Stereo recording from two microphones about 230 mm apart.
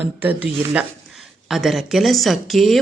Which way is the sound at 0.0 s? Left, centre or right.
Centre.